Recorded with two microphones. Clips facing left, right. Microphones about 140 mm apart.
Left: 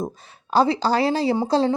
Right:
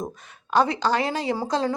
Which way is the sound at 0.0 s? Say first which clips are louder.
Left 4 dB; 30° left (ahead or behind).